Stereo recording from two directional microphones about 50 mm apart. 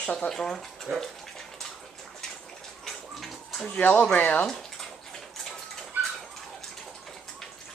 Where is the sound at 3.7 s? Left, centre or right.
Left.